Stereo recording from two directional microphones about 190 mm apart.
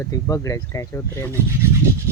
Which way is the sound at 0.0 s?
15° left (ahead or behind).